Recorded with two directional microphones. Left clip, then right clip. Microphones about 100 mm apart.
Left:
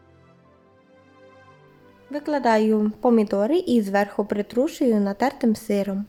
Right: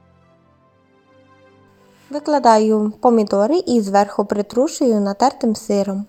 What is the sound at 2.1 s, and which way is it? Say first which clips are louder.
Speech: right 7 dB; 20° right (ahead or behind).